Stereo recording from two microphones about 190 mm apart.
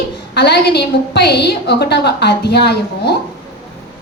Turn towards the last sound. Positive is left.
turn(degrees=60)  # may be behind; listen again after turning